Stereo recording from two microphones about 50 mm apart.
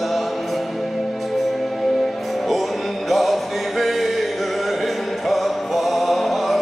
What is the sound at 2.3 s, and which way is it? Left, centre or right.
Music, centre.